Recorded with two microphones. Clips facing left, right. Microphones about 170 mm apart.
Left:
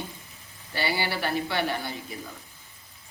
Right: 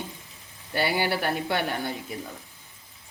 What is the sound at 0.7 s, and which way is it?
A woman's voice, 60° right (ahead or behind).